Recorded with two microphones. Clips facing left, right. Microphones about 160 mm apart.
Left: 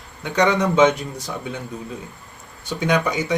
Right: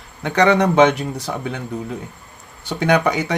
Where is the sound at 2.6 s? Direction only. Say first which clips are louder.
Right 4 dB; 65° right (ahead or behind).